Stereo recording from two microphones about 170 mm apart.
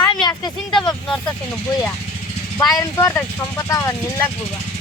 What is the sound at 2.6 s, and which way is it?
Speech, 20° left (ahead or behind).